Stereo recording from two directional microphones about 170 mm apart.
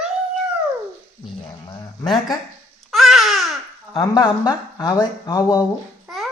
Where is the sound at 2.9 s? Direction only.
Centre (ahead or behind).